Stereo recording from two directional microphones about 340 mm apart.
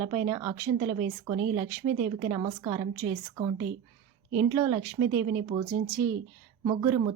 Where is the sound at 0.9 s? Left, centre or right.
Right.